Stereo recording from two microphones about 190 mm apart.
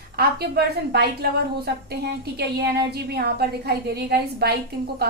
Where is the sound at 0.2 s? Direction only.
55° right (ahead or behind).